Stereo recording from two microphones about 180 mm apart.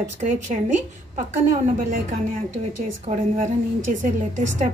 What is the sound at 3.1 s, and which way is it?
A woman's voice, 45° right (ahead or behind).